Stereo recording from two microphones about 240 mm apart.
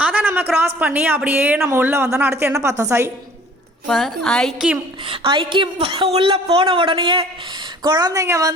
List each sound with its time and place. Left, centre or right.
0.0 s speech: centre
3.8 s a woman's voice: centre
5.0 s a woman's voice: right